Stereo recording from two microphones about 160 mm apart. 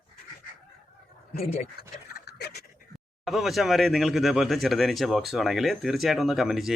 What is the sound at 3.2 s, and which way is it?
Speech, centre (ahead or behind).